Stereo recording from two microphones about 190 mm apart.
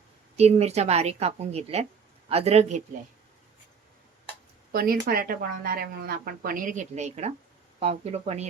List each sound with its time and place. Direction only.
0.3 s a woman's voice: 35° right (ahead or behind)
4.7 s a woman's voice: 55° right (ahead or behind); by 8.4 s 35° right (ahead or behind)